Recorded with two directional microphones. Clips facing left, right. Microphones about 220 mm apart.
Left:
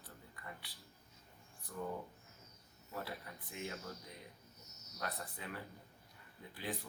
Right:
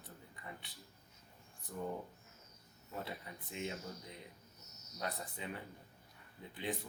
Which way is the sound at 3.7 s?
15° right (ahead or behind).